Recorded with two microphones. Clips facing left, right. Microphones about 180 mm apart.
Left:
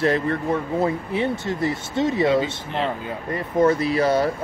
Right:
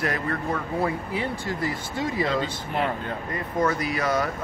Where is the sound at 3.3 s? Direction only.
25° left (ahead or behind).